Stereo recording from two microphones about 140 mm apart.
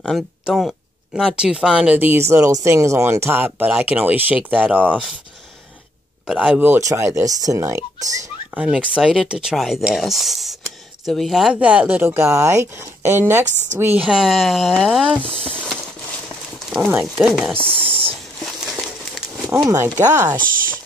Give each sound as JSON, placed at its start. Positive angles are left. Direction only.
{"t": 0.0, "sound": "speech", "side_deg": 0}
{"t": 6.2, "sound": "speech", "side_deg": -5}
{"t": 6.7, "sound": "speech", "side_deg": -20}
{"t": 8.5, "sound": "speech", "side_deg": -5}
{"t": 14.0, "sound": "speech", "side_deg": -5}
{"t": 17.0, "sound": "speech", "side_deg": 0}
{"t": 17.6, "sound": "speech", "side_deg": -40}
{"t": 19.5, "sound": "speech", "side_deg": -20}